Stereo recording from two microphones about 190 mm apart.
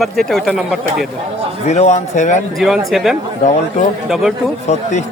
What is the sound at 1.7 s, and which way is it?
Speech, 35° left (ahead or behind).